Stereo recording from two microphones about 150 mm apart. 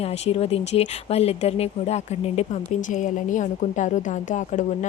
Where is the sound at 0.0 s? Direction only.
40° left (ahead or behind).